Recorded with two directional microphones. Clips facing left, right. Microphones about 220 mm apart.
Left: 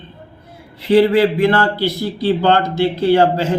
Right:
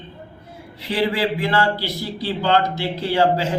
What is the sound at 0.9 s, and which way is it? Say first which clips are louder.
Speech: left 9 dB; 55° left (ahead or behind).